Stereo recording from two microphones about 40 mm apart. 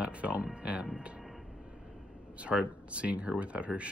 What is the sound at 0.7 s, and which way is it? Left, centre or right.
Speech, right.